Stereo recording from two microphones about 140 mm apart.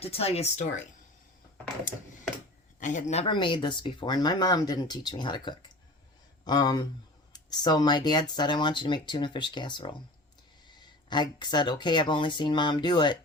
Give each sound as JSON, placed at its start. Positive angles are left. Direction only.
{"t": 0.0, "sound": "speech", "side_deg": 45}
{"t": 2.8, "sound": "speech", "side_deg": 60}
{"t": 3.2, "sound": "speech", "side_deg": 35}